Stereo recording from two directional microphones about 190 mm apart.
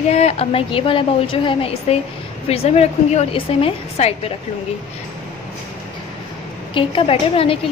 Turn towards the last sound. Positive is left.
turn(degrees=30)  # may be behind; listen again after turning